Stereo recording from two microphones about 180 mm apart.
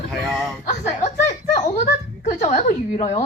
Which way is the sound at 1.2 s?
40° left (ahead or behind).